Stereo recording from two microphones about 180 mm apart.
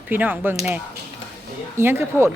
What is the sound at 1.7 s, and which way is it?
Speech, 15° right (ahead or behind).